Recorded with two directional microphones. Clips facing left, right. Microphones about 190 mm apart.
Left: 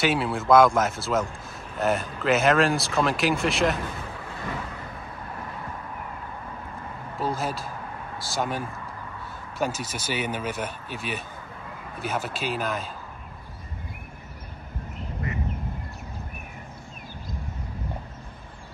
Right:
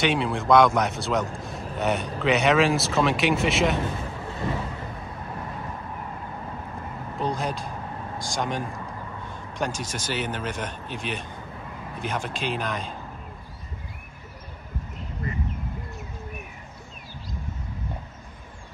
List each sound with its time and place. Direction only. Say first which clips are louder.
0.0 s speech: right 1 dB; 5° left (ahead or behind)
7.2 s speech: even; 5° left (ahead or behind)